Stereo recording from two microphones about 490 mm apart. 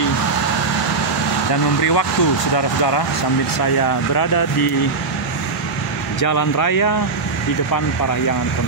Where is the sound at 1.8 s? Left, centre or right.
Left.